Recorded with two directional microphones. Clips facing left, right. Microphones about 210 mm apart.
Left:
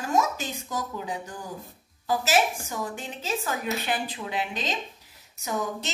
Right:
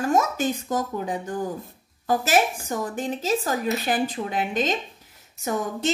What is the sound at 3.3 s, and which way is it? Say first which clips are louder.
A woman's voice: right 4 dB; 35° right (ahead or behind).